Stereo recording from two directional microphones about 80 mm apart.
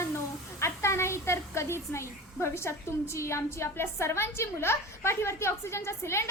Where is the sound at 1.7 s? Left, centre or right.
Left.